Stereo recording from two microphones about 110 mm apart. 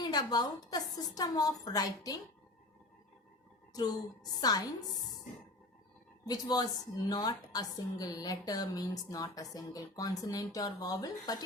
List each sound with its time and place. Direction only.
0.0 s a woman's voice: 40° left (ahead or behind)
4.4 s a woman's voice: 35° left (ahead or behind)
6.2 s a woman's voice: 35° left (ahead or behind)